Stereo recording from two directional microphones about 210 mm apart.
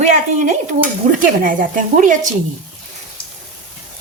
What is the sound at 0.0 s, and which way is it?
Dishes, 35° right (ahead or behind).